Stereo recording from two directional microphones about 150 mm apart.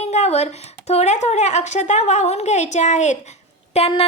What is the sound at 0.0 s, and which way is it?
A woman's voice, 45° left (ahead or behind).